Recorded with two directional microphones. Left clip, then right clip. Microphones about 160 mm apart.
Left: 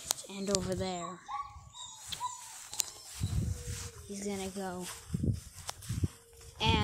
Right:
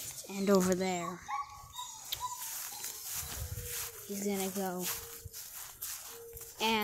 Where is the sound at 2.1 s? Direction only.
25° right (ahead or behind).